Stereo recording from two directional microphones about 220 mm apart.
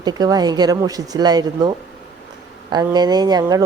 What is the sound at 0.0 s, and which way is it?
A woman's voice, 20° right (ahead or behind).